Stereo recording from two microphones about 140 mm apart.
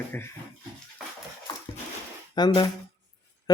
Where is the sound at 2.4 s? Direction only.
30° left (ahead or behind).